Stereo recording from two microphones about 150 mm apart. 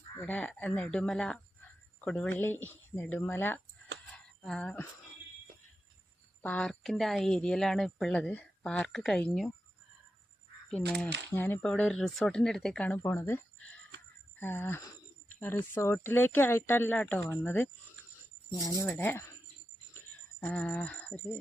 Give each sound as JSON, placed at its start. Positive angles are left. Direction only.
{"t": 0.2, "sound": "speech", "side_deg": 10}
{"t": 4.1, "sound": "a sound", "side_deg": 5}
{"t": 6.4, "sound": "a woman's voice", "side_deg": 10}
{"t": 10.7, "sound": "a woman's voice", "side_deg": 5}
{"t": 13.0, "sound": "speech", "side_deg": 20}
{"t": 20.4, "sound": "speech", "side_deg": 10}